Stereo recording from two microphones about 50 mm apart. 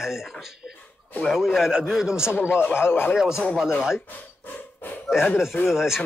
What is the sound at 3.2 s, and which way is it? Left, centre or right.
Speech, centre.